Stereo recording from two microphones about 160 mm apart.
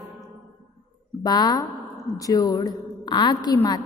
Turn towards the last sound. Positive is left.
turn(degrees=25)  # may be behind; listen again after turning